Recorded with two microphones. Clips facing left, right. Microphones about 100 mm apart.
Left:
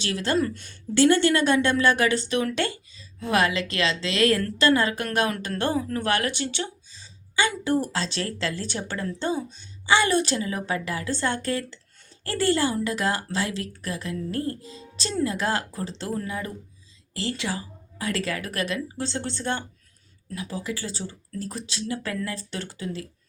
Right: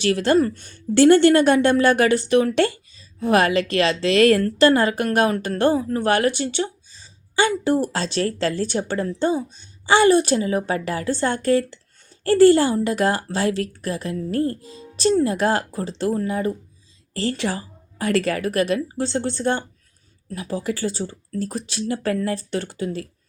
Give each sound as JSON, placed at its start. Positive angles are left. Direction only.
{"t": 0.0, "sound": "a woman's voice", "side_deg": -55}
{"t": 16.2, "sound": "a woman's voice", "side_deg": -35}